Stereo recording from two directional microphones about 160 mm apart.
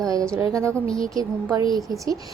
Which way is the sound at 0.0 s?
20° right (ahead or behind).